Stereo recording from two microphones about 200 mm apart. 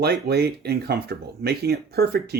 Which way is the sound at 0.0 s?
50° right (ahead or behind).